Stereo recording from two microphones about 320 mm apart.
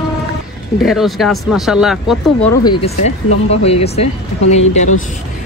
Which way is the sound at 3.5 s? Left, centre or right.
Centre.